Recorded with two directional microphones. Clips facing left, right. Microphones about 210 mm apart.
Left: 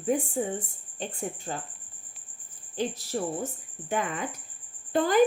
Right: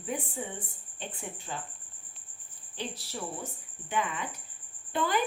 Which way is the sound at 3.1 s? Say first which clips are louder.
Left 9 dB; 50° left (ahead or behind).